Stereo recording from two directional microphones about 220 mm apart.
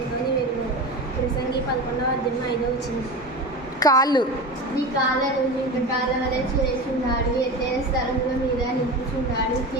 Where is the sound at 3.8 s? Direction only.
15° left (ahead or behind).